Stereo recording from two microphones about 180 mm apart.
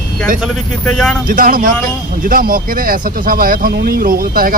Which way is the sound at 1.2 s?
50° right (ahead or behind).